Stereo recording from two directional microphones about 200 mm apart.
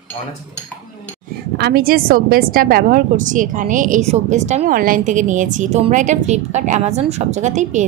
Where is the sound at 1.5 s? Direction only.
50° right (ahead or behind).